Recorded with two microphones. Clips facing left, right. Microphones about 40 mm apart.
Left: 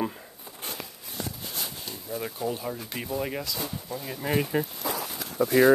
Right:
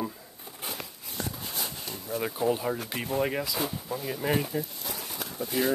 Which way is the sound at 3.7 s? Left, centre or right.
Centre.